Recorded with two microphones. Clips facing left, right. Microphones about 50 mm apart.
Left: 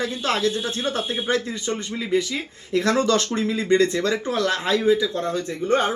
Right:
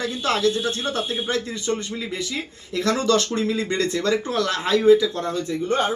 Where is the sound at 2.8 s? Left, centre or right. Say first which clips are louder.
Left 1 dB; left.